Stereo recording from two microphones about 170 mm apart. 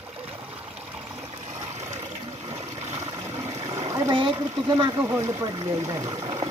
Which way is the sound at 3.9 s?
25° right (ahead or behind).